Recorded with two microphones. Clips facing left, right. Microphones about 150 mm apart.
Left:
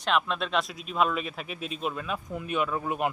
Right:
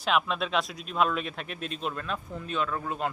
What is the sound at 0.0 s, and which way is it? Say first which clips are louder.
Speech: even; 5° right (ahead or behind).